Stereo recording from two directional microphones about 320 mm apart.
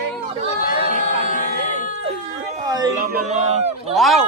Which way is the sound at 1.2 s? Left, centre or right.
Left.